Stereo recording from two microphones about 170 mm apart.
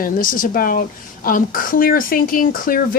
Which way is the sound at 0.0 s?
55° left (ahead or behind).